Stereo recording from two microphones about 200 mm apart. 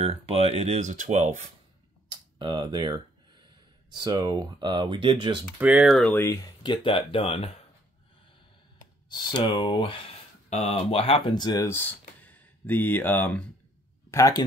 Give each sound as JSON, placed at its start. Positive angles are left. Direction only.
{"t": 0.0, "sound": "speech", "side_deg": -30}
{"t": 2.0, "sound": "speech", "side_deg": -25}
{"t": 5.6, "sound": "speech", "side_deg": -5}
{"t": 9.1, "sound": "speech", "side_deg": 20}